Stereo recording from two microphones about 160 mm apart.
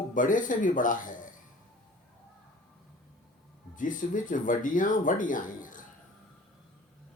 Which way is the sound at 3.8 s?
55° left (ahead or behind).